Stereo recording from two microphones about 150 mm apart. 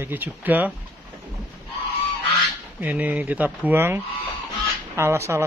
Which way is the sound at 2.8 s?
10° right (ahead or behind).